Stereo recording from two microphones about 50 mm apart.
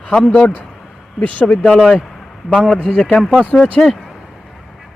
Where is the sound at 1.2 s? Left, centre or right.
Left.